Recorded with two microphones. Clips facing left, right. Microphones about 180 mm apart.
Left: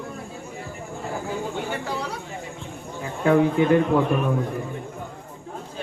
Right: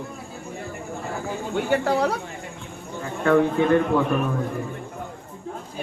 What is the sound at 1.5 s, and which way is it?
Speech, 60° right (ahead or behind).